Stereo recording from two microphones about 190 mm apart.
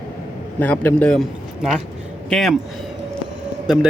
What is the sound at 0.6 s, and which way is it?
A man's voice, 10° left (ahead or behind).